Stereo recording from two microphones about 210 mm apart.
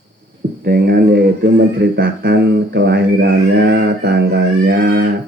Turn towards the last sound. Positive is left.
turn(degrees=-50)  # may be behind; listen again after turning